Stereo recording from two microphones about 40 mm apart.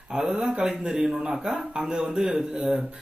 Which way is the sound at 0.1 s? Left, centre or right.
Centre.